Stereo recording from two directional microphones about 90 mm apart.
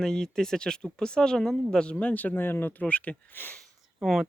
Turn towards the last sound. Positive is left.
turn(degrees=-5)  # may be behind; listen again after turning